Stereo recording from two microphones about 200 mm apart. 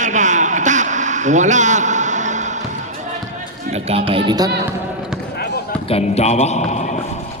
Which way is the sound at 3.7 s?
30° right (ahead or behind).